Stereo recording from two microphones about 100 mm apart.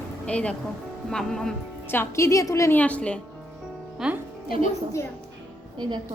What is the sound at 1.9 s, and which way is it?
Speech, 25° left (ahead or behind).